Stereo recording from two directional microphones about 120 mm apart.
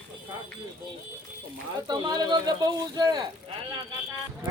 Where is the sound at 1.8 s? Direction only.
35° right (ahead or behind).